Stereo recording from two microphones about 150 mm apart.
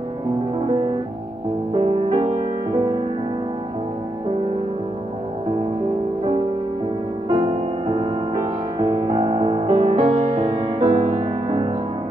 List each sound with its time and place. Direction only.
1.8 s music: 40° right (ahead or behind)
7.2 s music: 35° right (ahead or behind)
8.4 s music: 25° right (ahead or behind)